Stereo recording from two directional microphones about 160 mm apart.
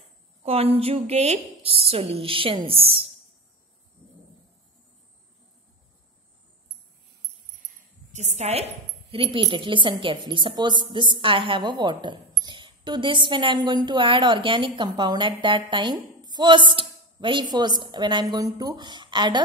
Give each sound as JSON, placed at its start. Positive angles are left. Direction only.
{"t": 0.4, "sound": "a woman's voice", "side_deg": -40}
{"t": 8.1, "sound": "a woman's voice", "side_deg": -45}